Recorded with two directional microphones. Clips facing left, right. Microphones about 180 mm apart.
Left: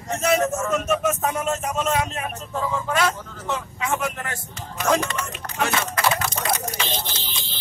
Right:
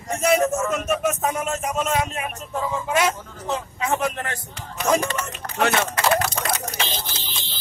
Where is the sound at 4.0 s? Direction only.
35° right (ahead or behind).